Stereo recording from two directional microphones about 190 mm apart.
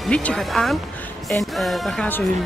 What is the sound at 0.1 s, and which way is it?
Speech, 5° left (ahead or behind).